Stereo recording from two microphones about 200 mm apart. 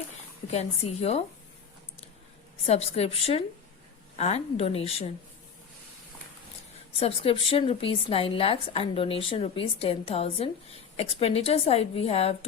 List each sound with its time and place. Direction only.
0.5 s a woman's voice: 35° left (ahead or behind)
2.6 s a woman's voice: 30° left (ahead or behind)
7.0 s a woman's voice: 30° left (ahead or behind)